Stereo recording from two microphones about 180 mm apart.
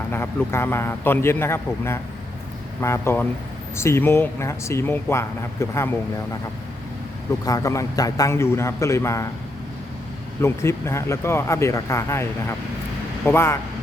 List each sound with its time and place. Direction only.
0.1 s speech: 15° left (ahead or behind)
7.4 s speech: 20° left (ahead or behind)
10.4 s speech: 15° left (ahead or behind)